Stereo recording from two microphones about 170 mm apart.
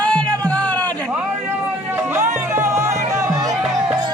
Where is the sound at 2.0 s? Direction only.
15° right (ahead or behind).